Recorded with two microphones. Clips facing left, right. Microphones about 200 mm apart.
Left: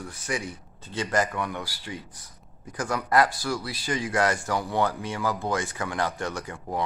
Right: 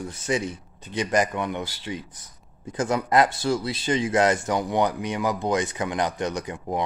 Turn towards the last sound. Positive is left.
turn(degrees=-20)  # may be behind; listen again after turning